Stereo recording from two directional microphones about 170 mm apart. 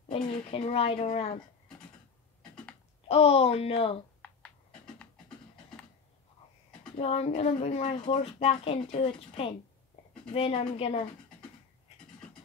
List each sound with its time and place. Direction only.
0.1 s speech: 30° left (ahead or behind)
3.1 s speech: 35° left (ahead or behind)
7.0 s speech: 35° left (ahead or behind)